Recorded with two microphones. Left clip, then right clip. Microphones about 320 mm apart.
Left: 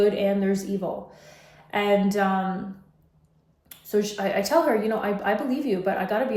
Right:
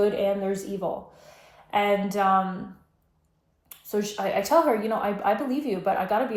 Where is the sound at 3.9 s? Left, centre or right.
Centre.